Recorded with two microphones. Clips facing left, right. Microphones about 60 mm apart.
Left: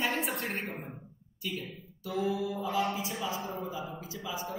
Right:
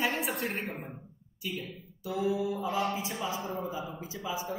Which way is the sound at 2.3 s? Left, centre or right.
Right.